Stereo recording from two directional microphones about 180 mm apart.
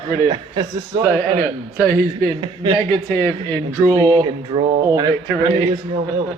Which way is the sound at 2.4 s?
25° right (ahead or behind).